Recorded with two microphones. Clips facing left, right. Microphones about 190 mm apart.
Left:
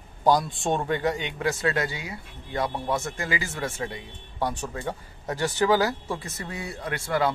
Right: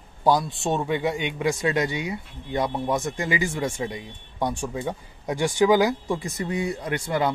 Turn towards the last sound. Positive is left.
turn(degrees=-20)  # may be behind; listen again after turning